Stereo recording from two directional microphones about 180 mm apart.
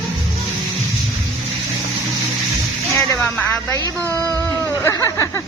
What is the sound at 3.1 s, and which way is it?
Speech, 15° left (ahead or behind).